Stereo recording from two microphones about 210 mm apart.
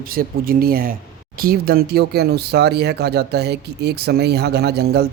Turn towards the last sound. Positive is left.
turn(degrees=-50)  # may be behind; listen again after turning